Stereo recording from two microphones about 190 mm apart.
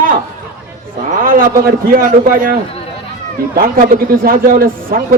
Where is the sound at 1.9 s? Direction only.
45° right (ahead or behind).